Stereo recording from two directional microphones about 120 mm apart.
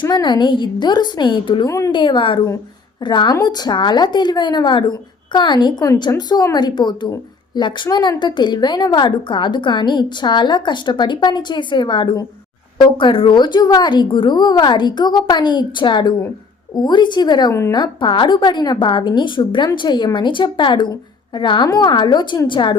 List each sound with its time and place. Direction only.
0.0 s a woman's voice: 40° left (ahead or behind)
1.6 s speech: 25° left (ahead or behind)
1.9 s a woman's voice: 40° left (ahead or behind)